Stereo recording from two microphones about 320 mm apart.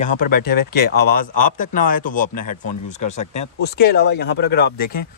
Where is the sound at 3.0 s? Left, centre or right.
Left.